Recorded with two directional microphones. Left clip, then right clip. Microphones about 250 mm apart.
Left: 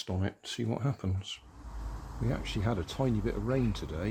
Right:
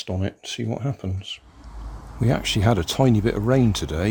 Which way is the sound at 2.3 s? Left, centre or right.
Right.